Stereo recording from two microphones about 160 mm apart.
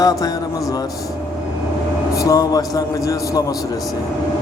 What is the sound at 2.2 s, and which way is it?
Speech, 20° left (ahead or behind).